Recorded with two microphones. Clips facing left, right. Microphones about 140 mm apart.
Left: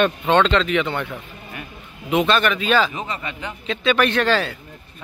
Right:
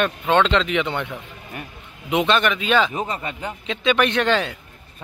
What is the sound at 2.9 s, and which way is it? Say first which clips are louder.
Speech: right 2 dB; 40° right (ahead or behind).